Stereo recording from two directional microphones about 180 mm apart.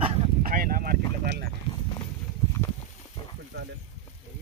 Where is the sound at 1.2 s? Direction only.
65° right (ahead or behind).